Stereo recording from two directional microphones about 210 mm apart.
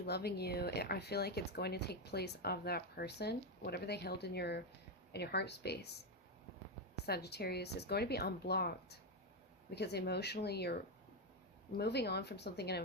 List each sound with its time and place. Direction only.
0.0 s speech: 50° left (ahead or behind)
6.9 s speech: 50° left (ahead or behind)
11.8 s speech: 50° left (ahead or behind)